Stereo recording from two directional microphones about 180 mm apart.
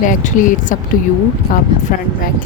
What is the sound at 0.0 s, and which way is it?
Speech, 45° left (ahead or behind).